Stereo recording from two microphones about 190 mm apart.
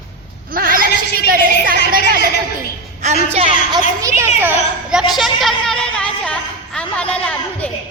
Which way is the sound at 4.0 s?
15° right (ahead or behind).